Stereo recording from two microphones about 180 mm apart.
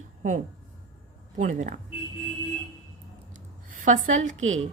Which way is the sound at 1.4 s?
45° right (ahead or behind).